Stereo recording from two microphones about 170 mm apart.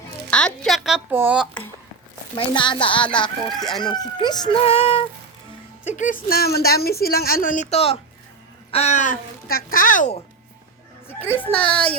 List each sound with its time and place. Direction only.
0.3 s a woman's voice: 5° left (ahead or behind)
2.3 s speech: 30° left (ahead or behind)
3.6 s speech: centre (ahead or behind)
3.8 s speech: 25° left (ahead or behind)
5.8 s a woman's voice: 45° left (ahead or behind)
11.4 s speech: 5° left (ahead or behind)